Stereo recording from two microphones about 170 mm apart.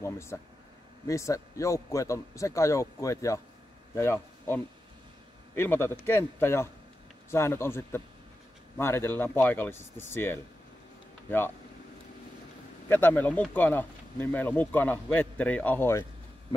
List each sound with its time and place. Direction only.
0.0 s a man's voice: 15° left (ahead or behind)
12.8 s speech: 10° left (ahead or behind)